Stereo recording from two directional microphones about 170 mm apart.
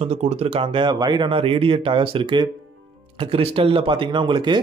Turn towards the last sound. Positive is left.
turn(degrees=-25)  # may be behind; listen again after turning